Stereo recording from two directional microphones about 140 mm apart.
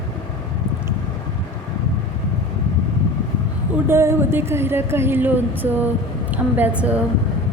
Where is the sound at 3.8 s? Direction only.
15° right (ahead or behind).